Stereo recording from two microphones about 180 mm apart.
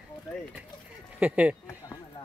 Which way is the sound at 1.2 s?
5° right (ahead or behind).